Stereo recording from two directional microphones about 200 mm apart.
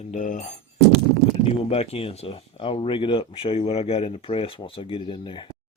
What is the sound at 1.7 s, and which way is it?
Speech, 30° left (ahead or behind).